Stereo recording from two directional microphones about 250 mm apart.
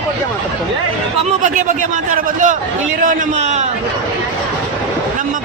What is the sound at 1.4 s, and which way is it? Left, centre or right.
A man's voice, right.